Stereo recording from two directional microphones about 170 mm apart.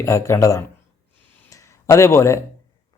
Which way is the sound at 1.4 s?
20° left (ahead or behind).